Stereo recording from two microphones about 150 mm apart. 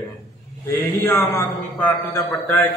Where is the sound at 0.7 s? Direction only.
15° left (ahead or behind).